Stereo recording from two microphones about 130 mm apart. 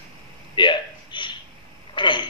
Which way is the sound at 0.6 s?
35° left (ahead or behind).